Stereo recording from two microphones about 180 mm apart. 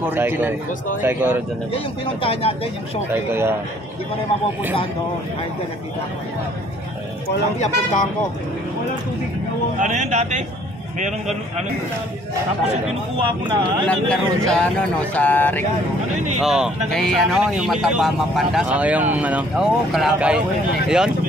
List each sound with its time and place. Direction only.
0.0 s speech: 10° right (ahead or behind)
2.2 s speech: 35° left (ahead or behind)
3.1 s speech: 15° right (ahead or behind)
7.5 s speech: 40° left (ahead or behind)
9.8 s a man's voice: 45° right (ahead or behind)
13.4 s speech: 25° right (ahead or behind)
13.8 s speech: 5° left (ahead or behind)
16.3 s speech: 5° right (ahead or behind)